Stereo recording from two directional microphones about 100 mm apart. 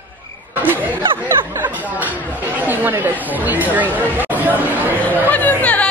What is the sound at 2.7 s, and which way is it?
Speech, 20° right (ahead or behind).